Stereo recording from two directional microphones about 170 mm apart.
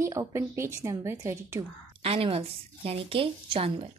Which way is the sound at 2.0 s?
35° right (ahead or behind).